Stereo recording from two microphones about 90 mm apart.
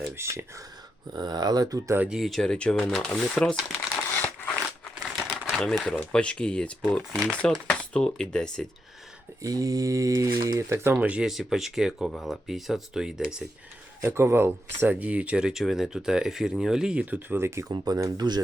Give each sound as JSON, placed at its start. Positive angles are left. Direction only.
{"t": 0.2, "sound": "speech", "side_deg": -30}
{"t": 1.1, "sound": "speech", "side_deg": -50}
{"t": 2.0, "sound": "speech", "side_deg": -5}
{"t": 4.1, "sound": "crumpling", "side_deg": 20}
{"t": 5.5, "sound": "speech", "side_deg": 5}
{"t": 9.4, "sound": "speech", "side_deg": -40}
{"t": 10.6, "sound": "speech", "side_deg": -30}
{"t": 11.0, "sound": "speech", "side_deg": -15}
{"t": 11.3, "sound": "speech", "side_deg": -5}
{"t": 14.0, "sound": "speech", "side_deg": -25}
{"t": 17.7, "sound": "speech", "side_deg": -40}